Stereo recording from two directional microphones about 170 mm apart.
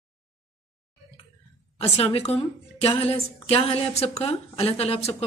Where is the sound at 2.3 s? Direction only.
35° left (ahead or behind).